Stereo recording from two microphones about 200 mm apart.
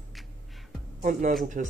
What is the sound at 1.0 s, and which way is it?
Speech, 45° right (ahead or behind).